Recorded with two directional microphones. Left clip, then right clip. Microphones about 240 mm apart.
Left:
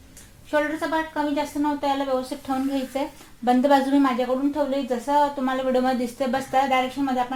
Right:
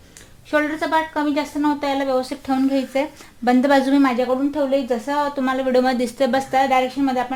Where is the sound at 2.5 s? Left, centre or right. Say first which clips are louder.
Right 5 dB; right.